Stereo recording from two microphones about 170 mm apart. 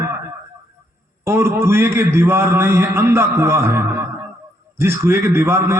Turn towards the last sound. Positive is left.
turn(degrees=-15)  # may be behind; listen again after turning